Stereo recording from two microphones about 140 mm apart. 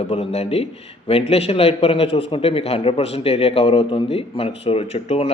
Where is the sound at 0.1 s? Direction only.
45° left (ahead or behind).